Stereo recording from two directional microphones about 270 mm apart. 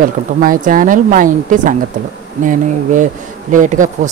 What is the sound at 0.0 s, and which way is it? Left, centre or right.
Speech, right.